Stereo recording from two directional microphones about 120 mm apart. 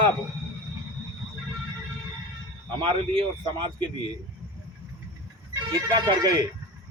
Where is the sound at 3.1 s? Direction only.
40° right (ahead or behind).